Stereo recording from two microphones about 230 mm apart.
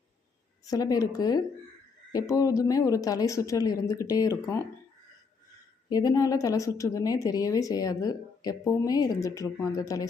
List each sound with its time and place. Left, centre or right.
0.6 s speech: centre
5.9 s speech: centre